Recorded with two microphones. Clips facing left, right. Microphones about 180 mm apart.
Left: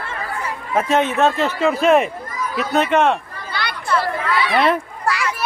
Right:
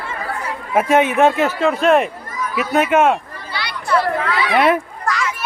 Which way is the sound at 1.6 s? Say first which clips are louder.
Left 1 dB; centre (ahead or behind).